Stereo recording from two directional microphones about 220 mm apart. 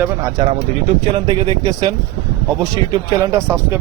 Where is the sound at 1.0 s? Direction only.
25° right (ahead or behind).